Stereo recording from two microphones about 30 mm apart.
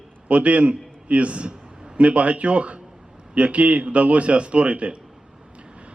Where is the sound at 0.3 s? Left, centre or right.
Right.